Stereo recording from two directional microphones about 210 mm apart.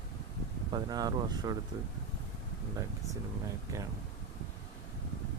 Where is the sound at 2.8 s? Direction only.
15° right (ahead or behind).